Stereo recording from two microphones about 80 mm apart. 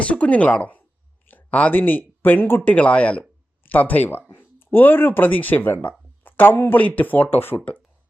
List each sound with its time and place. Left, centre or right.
0.0 s speech: centre